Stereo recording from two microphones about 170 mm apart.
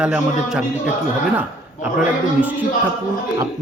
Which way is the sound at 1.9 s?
10° right (ahead or behind).